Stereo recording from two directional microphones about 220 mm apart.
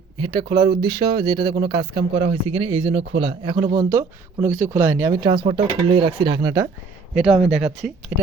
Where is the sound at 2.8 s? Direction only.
60° right (ahead or behind).